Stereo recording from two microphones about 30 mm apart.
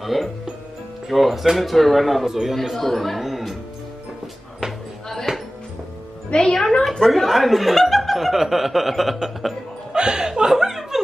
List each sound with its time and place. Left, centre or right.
0.0 s speech: centre
2.2 s speech: centre
2.5 s speech: centre
3.2 s music: centre
6.3 s a woman's voice: left
7.1 s speech: centre
8.3 s speech: centre
9.9 s chuckle: right